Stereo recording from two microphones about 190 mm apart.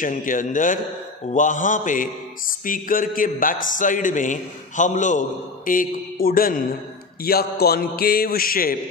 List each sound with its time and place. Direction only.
0.0 s a man's voice: 45° left (ahead or behind)